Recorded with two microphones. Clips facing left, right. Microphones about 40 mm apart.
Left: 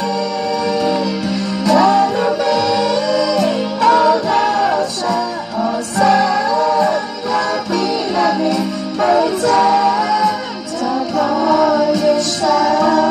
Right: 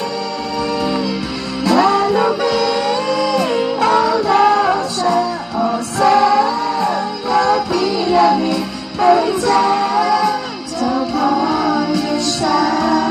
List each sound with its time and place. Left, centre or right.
0.8 s music: centre
1.6 s music: right
4.3 s music: centre
9.4 s music: right
11.1 s music: centre